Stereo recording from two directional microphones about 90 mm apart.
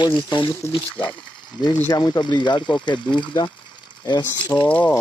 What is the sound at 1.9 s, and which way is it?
Speech, 45° left (ahead or behind).